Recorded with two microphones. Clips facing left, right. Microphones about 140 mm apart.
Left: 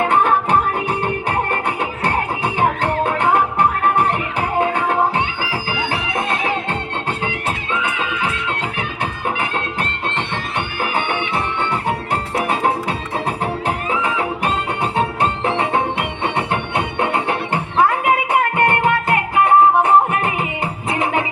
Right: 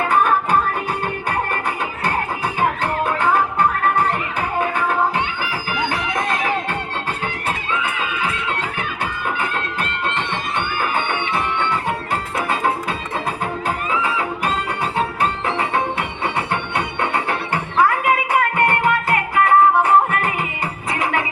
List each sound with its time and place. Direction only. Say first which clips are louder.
0.0 s music: left 1 dB; 25° left (ahead or behind)
2.0 s music: left 2 dB; 25° left (ahead or behind)
4.4 s music: left 4 dB; 25° left (ahead or behind)
14.0 s music: left 2 dB; 25° left (ahead or behind)